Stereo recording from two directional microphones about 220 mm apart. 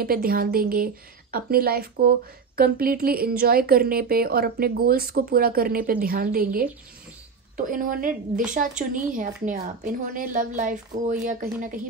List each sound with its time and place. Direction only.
0.0 s a woman's voice: 40° right (ahead or behind)